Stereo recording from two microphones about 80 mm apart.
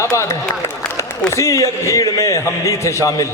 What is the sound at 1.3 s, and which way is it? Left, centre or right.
A man's voice, left.